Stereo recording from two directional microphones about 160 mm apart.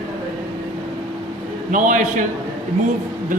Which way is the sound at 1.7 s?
55° right (ahead or behind).